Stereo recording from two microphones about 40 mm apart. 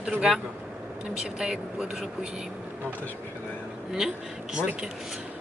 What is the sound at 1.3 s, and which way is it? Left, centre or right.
Speech, centre.